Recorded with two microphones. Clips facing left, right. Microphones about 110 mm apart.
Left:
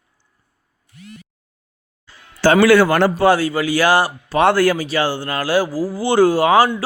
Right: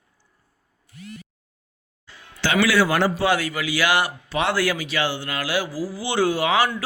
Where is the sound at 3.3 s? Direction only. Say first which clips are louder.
Left 7 dB; 35° left (ahead or behind).